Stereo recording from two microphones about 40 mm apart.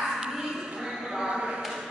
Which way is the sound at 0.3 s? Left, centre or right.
Centre.